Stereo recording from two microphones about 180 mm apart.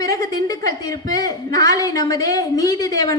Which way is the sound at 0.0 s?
20° left (ahead or behind).